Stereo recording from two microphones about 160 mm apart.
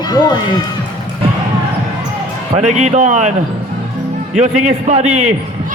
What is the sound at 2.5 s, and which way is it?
Speech, 45° right (ahead or behind).